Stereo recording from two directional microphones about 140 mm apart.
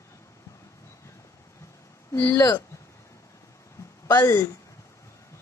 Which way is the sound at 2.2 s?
25° left (ahead or behind).